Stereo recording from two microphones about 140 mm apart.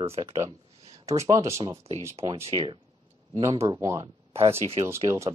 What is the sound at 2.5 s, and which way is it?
Speech, 35° right (ahead or behind).